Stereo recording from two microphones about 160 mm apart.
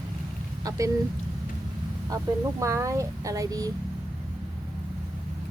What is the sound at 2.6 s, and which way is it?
Speech, 20° right (ahead or behind).